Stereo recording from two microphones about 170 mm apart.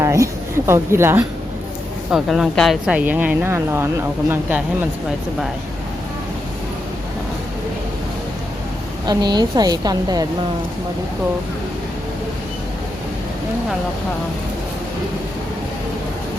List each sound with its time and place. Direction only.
0.0 s a woman's voice: 15° right (ahead or behind)
2.0 s speech: centre (ahead or behind)
9.0 s a woman's voice: 25° right (ahead or behind)